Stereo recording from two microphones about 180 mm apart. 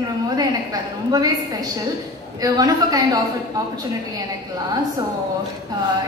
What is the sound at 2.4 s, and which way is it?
Speech, 20° right (ahead or behind).